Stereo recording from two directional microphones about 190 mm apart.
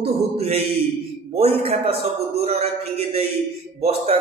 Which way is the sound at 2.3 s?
35° right (ahead or behind).